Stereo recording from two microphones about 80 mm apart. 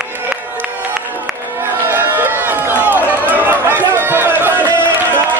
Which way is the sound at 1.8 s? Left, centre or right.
Right.